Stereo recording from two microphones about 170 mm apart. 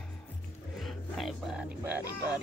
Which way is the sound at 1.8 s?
10° right (ahead or behind).